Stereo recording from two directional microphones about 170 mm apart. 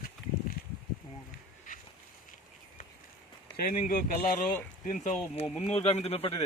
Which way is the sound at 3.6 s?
55° left (ahead or behind).